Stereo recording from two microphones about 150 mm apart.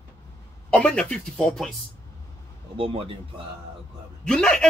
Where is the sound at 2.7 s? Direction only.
40° right (ahead or behind).